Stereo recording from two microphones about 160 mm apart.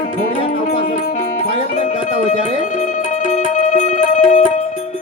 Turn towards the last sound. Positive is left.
turn(degrees=50)  # may be behind; listen again after turning